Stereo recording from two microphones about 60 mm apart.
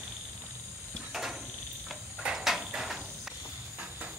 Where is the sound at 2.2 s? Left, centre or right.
Centre.